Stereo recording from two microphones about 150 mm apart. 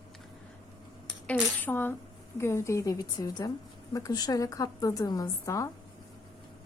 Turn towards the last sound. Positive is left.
turn(degrees=20)  # may be behind; listen again after turning